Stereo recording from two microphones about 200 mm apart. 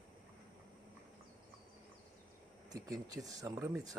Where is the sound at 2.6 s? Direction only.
20° right (ahead or behind).